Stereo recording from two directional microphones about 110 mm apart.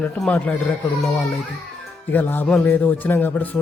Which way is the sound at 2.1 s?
20° left (ahead or behind).